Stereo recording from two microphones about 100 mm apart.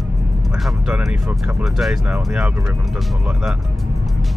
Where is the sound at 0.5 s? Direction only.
5° right (ahead or behind).